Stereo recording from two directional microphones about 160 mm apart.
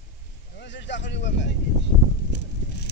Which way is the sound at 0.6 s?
90° left.